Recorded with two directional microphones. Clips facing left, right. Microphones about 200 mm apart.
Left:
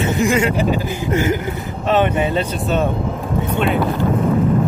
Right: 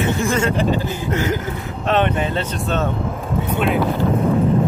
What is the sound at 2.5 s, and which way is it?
Speech, 5° left (ahead or behind).